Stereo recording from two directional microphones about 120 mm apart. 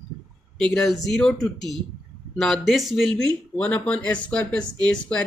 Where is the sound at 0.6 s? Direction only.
5° left (ahead or behind).